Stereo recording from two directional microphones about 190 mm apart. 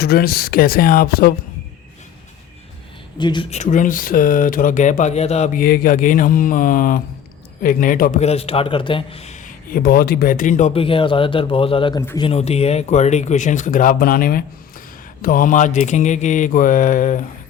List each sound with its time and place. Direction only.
0.0 s mantra: 55° left (ahead or behind)
3.2 s speech: 25° left (ahead or behind)
3.5 s a man's voice: 40° left (ahead or behind)
5.5 s mantra: 50° left (ahead or behind)
8.2 s a man's voice: 35° left (ahead or behind)
10.8 s a man's voice: 25° left (ahead or behind)